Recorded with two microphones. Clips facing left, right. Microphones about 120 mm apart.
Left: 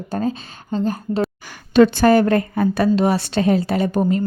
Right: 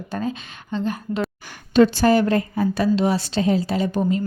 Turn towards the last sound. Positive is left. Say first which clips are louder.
# left 3 dB
turn(degrees=50)  # may be behind; listen again after turning